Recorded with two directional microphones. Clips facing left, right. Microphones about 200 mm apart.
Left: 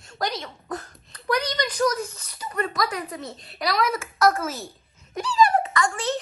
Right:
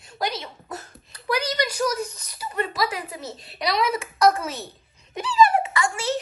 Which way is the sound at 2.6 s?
5° right (ahead or behind).